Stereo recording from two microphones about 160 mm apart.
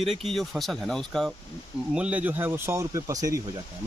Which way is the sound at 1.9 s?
10° right (ahead or behind).